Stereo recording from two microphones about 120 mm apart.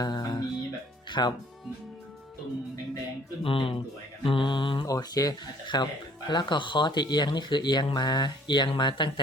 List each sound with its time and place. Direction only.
0.0 s music: 35° left (ahead or behind)
1.2 s speech: 35° left (ahead or behind)
3.4 s mantra: 50° left (ahead or behind)
4.9 s speech: 30° left (ahead or behind)